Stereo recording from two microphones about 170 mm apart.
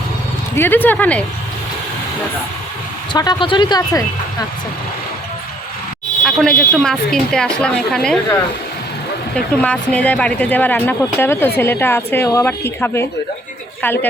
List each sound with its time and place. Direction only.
0.5 s speech: 15° left (ahead or behind)
3.1 s speech: 25° left (ahead or behind)
6.2 s a woman's voice: 5° left (ahead or behind)
9.3 s speech: 5° left (ahead or behind)